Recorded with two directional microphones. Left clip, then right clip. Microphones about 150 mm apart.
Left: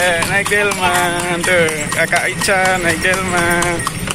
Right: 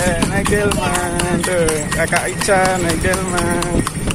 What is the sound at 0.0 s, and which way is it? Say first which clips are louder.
Speech: left 4 dB; centre (ahead or behind).